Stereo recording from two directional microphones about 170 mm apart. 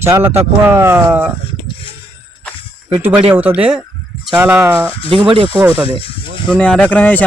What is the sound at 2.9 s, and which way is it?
Speech, 10° right (ahead or behind).